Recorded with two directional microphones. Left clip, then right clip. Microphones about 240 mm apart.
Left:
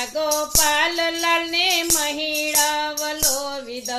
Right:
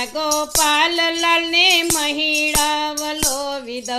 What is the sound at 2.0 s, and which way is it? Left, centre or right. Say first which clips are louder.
Music: right 5 dB; right.